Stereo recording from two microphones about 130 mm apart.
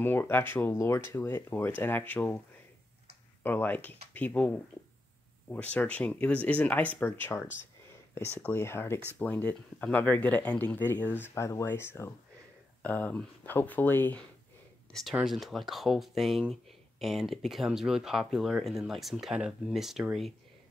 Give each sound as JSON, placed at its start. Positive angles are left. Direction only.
{"t": 0.0, "sound": "speech", "side_deg": 15}
{"t": 3.4, "sound": "speech", "side_deg": 15}
{"t": 14.9, "sound": "speech", "side_deg": 5}